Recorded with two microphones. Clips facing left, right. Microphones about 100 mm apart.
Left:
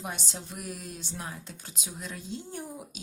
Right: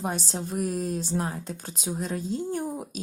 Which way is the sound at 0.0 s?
40° right (ahead or behind).